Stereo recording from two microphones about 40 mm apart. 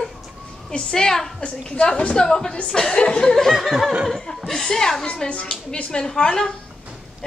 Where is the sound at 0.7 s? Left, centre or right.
Centre.